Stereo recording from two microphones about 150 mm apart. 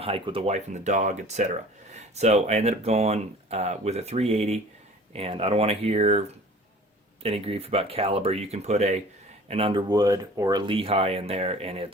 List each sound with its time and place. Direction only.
0.0 s speech: 35° right (ahead or behind)
9.5 s speech: 35° right (ahead or behind)
9.9 s speech: 25° right (ahead or behind); by 11.9 s 40° right (ahead or behind)